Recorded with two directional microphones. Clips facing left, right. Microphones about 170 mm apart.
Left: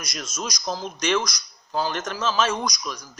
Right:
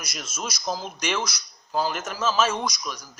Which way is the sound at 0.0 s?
Centre (ahead or behind).